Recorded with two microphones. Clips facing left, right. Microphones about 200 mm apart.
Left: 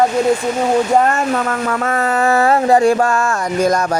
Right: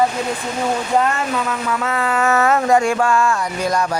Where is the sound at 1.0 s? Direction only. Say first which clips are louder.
Left 4 dB; 50° left (ahead or behind).